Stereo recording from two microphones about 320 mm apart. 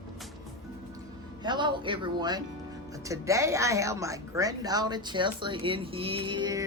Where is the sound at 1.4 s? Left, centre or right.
Centre.